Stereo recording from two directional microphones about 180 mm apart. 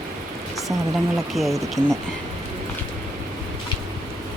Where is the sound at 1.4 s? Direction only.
Centre (ahead or behind).